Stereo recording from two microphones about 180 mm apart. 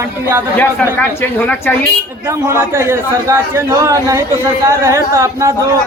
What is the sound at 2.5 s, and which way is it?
A man's voice, 15° right (ahead or behind).